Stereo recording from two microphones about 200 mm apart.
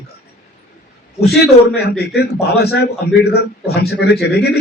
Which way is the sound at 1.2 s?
55° left (ahead or behind).